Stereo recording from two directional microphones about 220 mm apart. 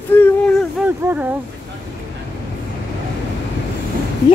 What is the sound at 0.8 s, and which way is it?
Speech, 10° right (ahead or behind).